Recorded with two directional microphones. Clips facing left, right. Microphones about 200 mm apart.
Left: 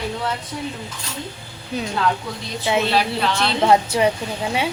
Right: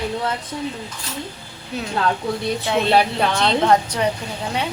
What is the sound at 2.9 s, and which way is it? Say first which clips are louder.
Speech: right 3 dB; 55° right (ahead or behind).